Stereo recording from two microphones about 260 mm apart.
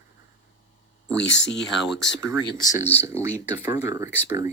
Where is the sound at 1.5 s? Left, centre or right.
Left.